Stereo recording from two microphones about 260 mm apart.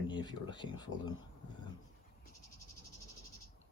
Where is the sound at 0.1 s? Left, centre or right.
Centre.